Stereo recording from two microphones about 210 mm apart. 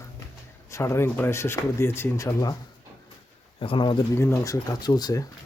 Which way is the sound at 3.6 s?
25° left (ahead or behind).